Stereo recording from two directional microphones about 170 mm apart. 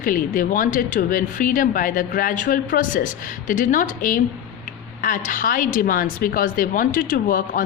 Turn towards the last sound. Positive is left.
turn(degrees=55)  # may be behind; listen again after turning